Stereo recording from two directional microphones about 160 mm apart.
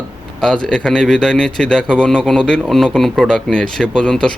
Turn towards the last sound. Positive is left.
turn(degrees=5)  # may be behind; listen again after turning